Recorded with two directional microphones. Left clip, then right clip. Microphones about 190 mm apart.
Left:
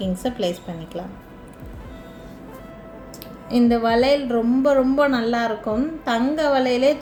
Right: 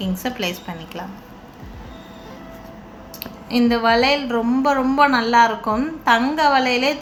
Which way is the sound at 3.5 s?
50° left (ahead or behind).